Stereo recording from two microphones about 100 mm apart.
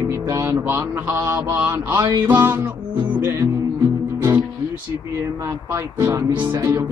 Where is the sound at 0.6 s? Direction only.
25° right (ahead or behind).